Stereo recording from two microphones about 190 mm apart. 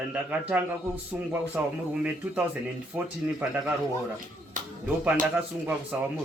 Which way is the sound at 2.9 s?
5° right (ahead or behind).